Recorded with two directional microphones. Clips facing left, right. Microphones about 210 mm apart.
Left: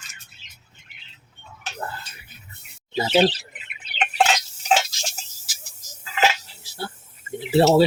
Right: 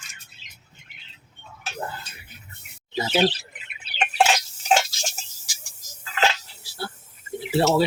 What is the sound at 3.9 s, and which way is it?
Drip, 10° right (ahead or behind).